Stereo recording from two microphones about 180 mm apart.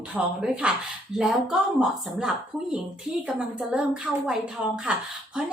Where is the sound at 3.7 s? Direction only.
5° right (ahead or behind).